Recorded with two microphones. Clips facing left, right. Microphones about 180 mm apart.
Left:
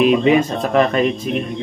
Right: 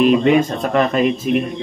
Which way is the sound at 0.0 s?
Centre (ahead or behind).